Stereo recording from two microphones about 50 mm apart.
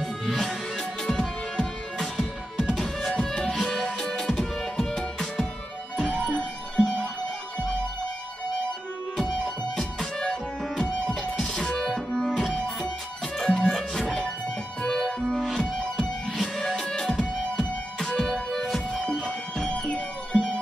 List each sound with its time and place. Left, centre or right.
0.0 s music: centre
6.8 s music: centre
9.2 s music: centre
11.3 s music: centre
19.2 s music: centre